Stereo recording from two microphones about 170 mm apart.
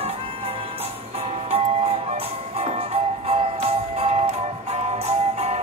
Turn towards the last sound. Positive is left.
turn(degrees=-40)  # may be behind; listen again after turning